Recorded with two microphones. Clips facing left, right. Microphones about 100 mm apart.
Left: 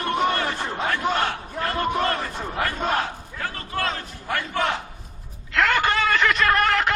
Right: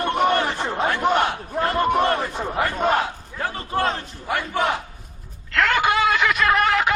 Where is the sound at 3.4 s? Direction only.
25° right (ahead or behind).